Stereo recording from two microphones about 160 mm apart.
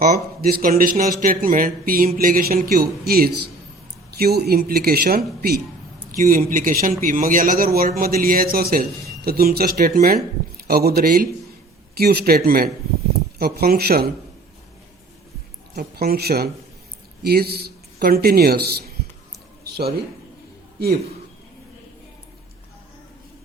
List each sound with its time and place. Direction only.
0.0 s a man's voice: 65° right (ahead or behind)
15.7 s speech: 70° right (ahead or behind)
19.6 s a sound: 80° right